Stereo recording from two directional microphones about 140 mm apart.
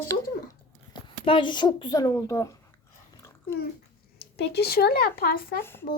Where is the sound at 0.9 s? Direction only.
35° left (ahead or behind).